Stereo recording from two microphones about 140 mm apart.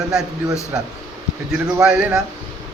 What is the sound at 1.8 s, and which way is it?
Speech, 5° right (ahead or behind).